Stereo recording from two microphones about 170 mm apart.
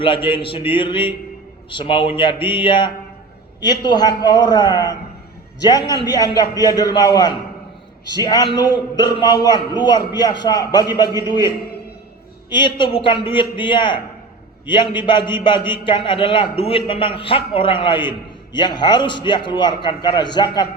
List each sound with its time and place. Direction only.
0.0 s a man's voice: 30° left (ahead or behind)